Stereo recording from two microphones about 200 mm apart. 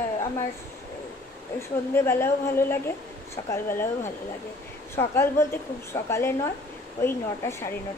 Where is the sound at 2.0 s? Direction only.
10° left (ahead or behind).